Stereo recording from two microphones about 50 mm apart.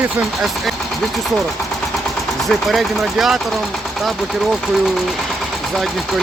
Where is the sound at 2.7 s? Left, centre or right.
Centre.